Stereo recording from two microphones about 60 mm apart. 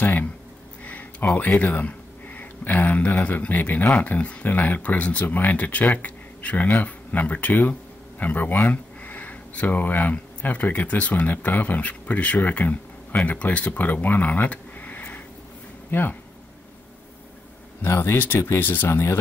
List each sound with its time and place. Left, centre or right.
0.0 s speech: left
1.3 s speech: left
17.8 s speech: left